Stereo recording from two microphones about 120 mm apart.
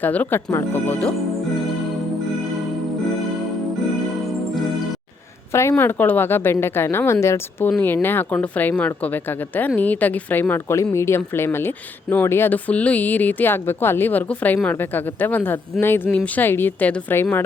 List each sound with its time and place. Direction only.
0.0 s speech: 15° left (ahead or behind)
5.5 s a woman's voice: 20° left (ahead or behind)